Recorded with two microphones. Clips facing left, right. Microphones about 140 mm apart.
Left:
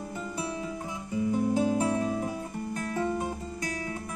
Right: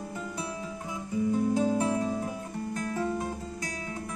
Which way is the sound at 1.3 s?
10° left (ahead or behind).